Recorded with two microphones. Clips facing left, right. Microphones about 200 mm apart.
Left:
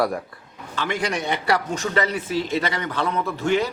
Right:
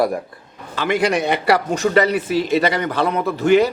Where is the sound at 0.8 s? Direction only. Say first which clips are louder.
Right 7 dB; 75° right (ahead or behind).